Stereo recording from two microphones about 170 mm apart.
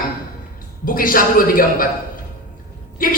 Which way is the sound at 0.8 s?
55° left (ahead or behind).